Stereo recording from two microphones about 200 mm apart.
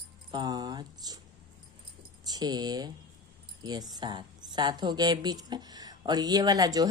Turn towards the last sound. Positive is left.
turn(degrees=-20)  # may be behind; listen again after turning